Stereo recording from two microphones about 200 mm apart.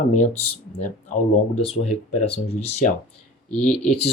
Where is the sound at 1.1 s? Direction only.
40° left (ahead or behind).